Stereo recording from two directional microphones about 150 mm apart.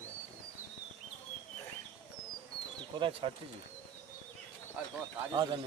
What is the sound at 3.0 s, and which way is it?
Speech, 35° right (ahead or behind).